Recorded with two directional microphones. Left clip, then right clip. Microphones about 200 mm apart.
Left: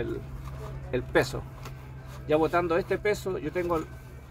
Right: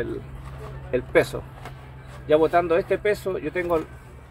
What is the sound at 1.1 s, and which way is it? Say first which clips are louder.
Speech: right 5 dB; 15° left (ahead or behind).